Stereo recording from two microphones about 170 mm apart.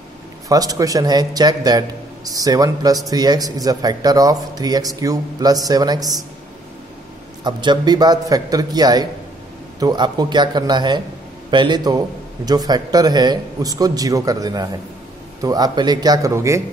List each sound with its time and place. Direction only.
0.5 s a man's voice: 20° right (ahead or behind)
7.4 s a man's voice: 25° right (ahead or behind)